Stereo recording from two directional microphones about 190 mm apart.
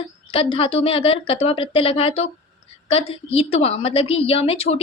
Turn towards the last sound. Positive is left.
turn(degrees=30)  # may be behind; listen again after turning